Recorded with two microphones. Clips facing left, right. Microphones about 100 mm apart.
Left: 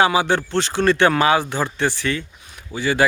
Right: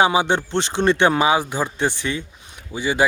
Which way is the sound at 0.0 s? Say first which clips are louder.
Even; 20° right (ahead or behind).